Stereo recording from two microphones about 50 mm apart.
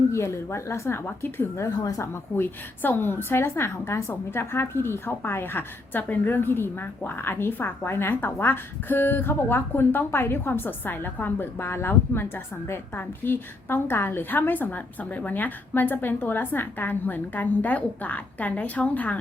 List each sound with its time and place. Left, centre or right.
0.1 s speech: left
1.5 s speech: left
2.3 s a woman's voice: left
3.5 s speech: left
4.3 s a woman's voice: left